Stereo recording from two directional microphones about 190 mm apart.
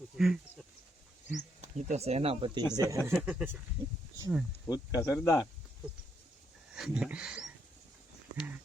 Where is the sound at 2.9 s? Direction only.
15° right (ahead or behind).